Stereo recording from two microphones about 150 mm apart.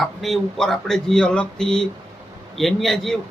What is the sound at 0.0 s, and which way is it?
Speech, centre (ahead or behind).